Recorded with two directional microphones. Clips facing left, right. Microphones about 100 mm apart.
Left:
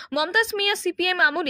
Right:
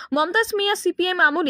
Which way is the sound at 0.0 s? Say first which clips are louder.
Right 3 dB; 35° right (ahead or behind).